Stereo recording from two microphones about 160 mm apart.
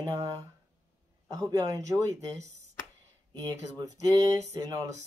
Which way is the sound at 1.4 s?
25° right (ahead or behind).